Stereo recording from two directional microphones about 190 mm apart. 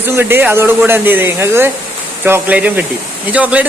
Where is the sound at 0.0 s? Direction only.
10° right (ahead or behind).